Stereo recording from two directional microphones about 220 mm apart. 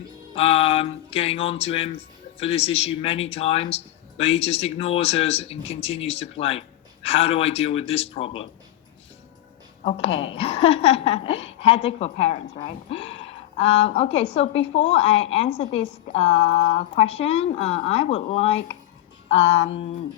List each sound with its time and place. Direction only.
0.3 s speech: 25° left (ahead or behind)
9.8 s speech: 25° left (ahead or behind)